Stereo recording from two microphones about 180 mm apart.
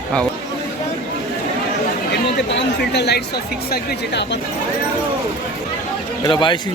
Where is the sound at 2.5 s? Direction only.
75° left (ahead or behind).